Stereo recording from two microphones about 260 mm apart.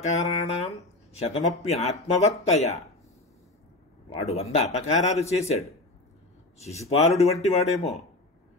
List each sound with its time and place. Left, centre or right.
0.0 s speech: left
4.1 s speech: left
6.6 s speech: left